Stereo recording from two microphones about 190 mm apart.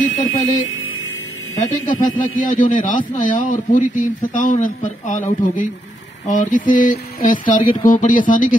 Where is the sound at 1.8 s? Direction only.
45° left (ahead or behind).